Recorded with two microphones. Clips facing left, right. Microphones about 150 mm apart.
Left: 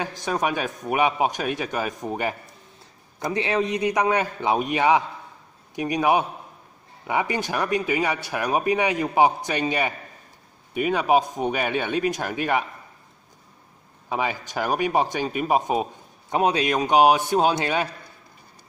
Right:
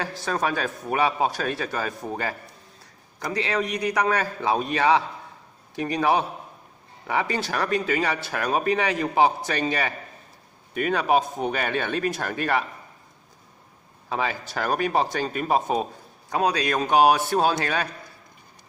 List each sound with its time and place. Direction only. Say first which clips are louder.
0.0 s a man's voice: left 1 dB; 15° left (ahead or behind)
14.0 s a man's voice: left 1 dB; 15° left (ahead or behind)